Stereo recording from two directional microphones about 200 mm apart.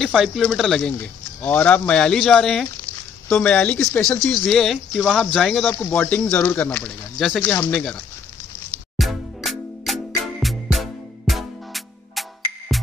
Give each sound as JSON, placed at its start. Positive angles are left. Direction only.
{"t": 0.0, "sound": "speech", "side_deg": 0}
{"t": 8.9, "sound": "music", "side_deg": 0}